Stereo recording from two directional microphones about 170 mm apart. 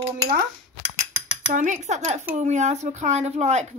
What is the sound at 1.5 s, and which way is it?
A woman's voice, 45° right (ahead or behind).